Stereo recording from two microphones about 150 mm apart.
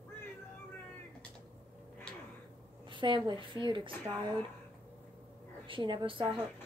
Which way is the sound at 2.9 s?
30° right (ahead or behind).